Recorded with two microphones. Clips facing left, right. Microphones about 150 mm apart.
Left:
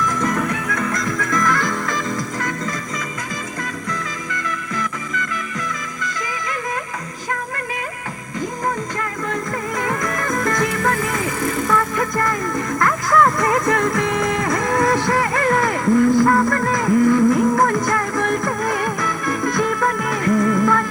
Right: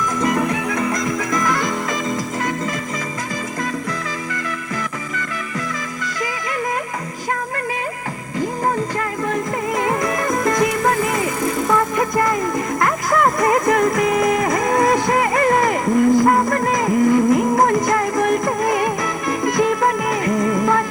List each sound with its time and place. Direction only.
0.2 s music: 15° right (ahead or behind)
9.3 s music: 20° right (ahead or behind)
13.7 s music: 5° right (ahead or behind)
14.4 s music: 20° right (ahead or behind)